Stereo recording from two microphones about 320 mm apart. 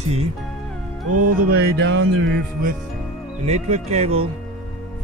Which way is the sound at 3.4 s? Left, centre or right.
Right.